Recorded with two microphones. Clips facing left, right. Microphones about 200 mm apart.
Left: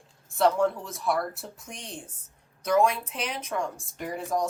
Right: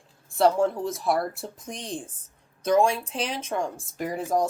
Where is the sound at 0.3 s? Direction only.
35° right (ahead or behind).